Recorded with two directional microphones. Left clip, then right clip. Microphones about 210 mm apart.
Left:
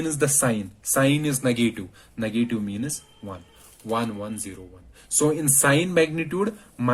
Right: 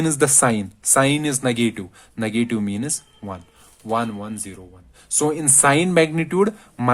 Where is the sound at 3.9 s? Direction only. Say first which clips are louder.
Right 4 dB; 30° right (ahead or behind).